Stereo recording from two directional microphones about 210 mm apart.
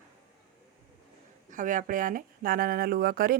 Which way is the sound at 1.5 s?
40° right (ahead or behind).